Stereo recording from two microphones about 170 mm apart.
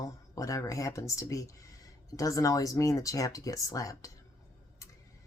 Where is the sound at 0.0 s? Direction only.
20° left (ahead or behind).